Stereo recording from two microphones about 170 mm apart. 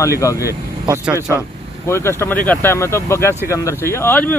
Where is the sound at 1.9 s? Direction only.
15° left (ahead or behind).